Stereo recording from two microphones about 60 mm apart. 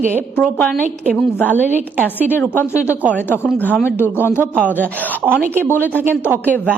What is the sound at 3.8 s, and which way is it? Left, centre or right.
Speech, left.